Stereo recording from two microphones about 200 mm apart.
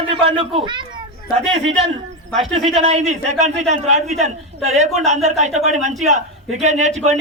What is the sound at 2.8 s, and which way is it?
A man's voice, 35° right (ahead or behind).